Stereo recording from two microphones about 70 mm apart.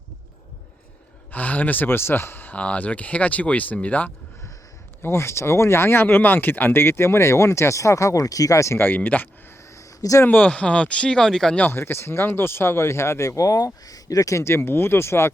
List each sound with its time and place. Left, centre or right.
1.3 s speech: left
5.0 s speech: left
8.8 s speech: left
9.7 s a sound: left
10.2 s speech: left; by 11.5 s centre
11.7 s speech: left